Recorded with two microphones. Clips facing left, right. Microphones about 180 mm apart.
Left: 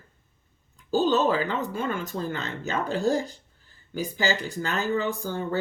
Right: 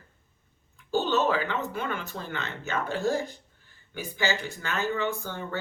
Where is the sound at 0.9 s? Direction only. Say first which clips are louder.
Left 3 dB; 35° left (ahead or behind).